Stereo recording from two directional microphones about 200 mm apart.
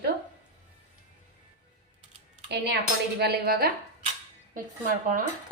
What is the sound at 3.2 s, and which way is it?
A woman's voice, 50° right (ahead or behind).